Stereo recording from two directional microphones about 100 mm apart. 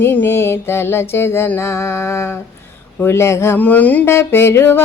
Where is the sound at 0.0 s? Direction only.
20° left (ahead or behind).